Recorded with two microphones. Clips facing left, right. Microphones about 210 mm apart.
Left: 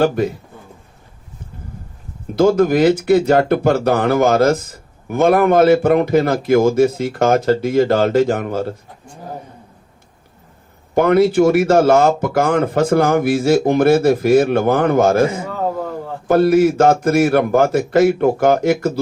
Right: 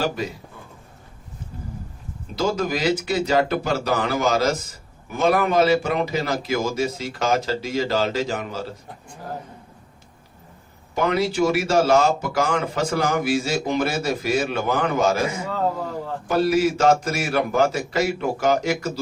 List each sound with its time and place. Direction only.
0.0 s speech: 55° left (ahead or behind)
2.3 s speech: 55° left (ahead or behind)
10.9 s speech: 55° left (ahead or behind)